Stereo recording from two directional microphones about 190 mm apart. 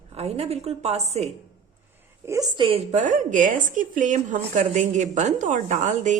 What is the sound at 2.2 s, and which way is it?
A woman's voice, 15° right (ahead or behind).